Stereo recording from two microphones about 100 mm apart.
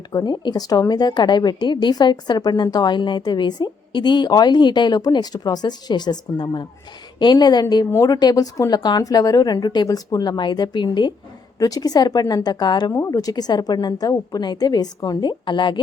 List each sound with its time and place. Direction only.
0.1 s a woman's voice: 45° left (ahead or behind)
7.9 s a woman's voice: 35° left (ahead or behind); by 15.8 s 50° left (ahead or behind)